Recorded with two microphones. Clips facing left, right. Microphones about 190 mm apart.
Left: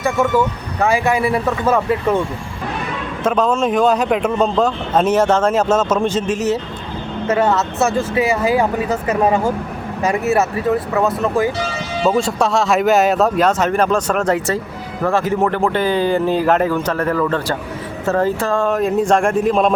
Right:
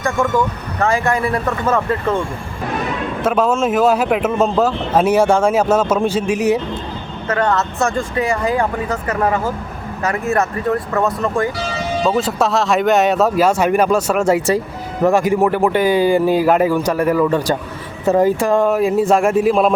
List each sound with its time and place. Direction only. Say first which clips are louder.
0.0 s speech: left 1 dB; 5° left (ahead or behind)
3.2 s speech: even; 5° right (ahead or behind)
7.3 s speech: left 1 dB; 5° left (ahead or behind)
9.2 s speech: left 2 dB; 20° left (ahead or behind)
10.0 s speech: left 2 dB; 10° left (ahead or behind)